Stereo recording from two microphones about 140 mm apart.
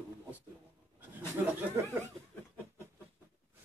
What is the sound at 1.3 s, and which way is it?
Speech, 20° right (ahead or behind).